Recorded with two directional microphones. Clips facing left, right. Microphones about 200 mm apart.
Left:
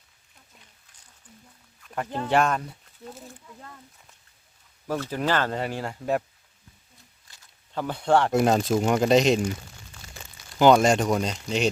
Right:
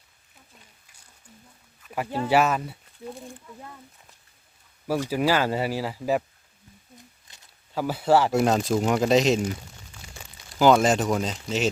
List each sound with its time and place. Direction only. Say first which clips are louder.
1.8 s speech: right 2 dB; 10° right (ahead or behind)
4.9 s speech: right 3 dB; 10° right (ahead or behind)
7.3 s a sound: right 2 dB; 20° right (ahead or behind)
7.7 s speech: right 1 dB; 5° right (ahead or behind)
10.5 s speech: left 1 dB; centre (ahead or behind)